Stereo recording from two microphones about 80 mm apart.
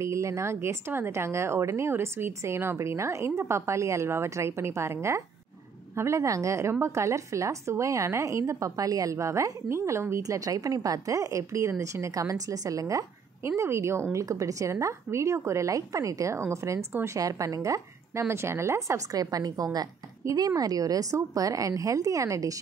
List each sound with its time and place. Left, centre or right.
0.0 s a woman's voice: right
13.5 s a woman's voice: right
17.2 s a woman's voice: right
18.3 s a woman's voice: right